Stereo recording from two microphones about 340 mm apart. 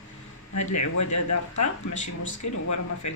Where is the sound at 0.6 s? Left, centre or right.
Left.